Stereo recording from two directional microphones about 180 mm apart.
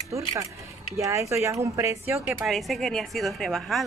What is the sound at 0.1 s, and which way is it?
Speech, 15° right (ahead or behind).